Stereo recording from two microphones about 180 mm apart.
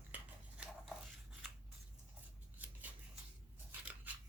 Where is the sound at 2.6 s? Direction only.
10° right (ahead or behind).